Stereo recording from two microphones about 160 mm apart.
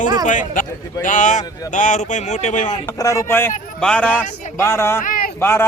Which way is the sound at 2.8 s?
20° left (ahead or behind).